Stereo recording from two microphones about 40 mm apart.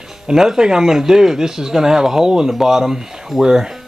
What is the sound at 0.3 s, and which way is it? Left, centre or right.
Speech, centre.